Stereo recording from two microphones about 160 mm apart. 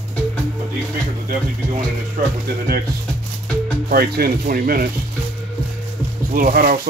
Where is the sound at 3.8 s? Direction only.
70° right (ahead or behind).